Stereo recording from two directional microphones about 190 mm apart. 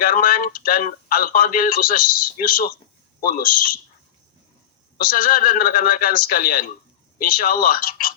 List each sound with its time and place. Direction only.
0.0 s speech: 50° left (ahead or behind)
4.9 s speech: 45° left (ahead or behind)